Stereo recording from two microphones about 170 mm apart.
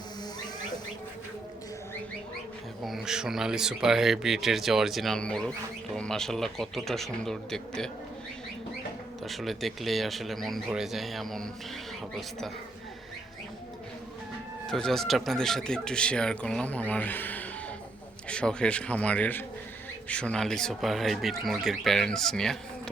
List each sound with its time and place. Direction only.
2.8 s speech: centre (ahead or behind)
9.2 s speech: centre (ahead or behind)
14.7 s a man's voice: 5° left (ahead or behind)